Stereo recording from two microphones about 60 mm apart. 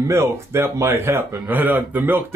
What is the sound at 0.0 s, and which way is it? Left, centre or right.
Speech, right.